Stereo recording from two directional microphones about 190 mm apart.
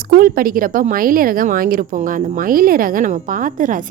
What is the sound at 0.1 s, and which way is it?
Speech, 50° right (ahead or behind).